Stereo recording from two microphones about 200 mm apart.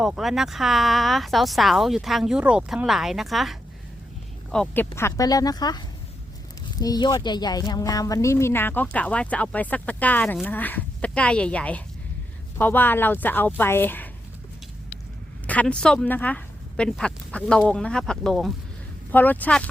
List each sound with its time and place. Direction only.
0.0 s speech: centre (ahead or behind)
15.4 s speech: 5° left (ahead or behind)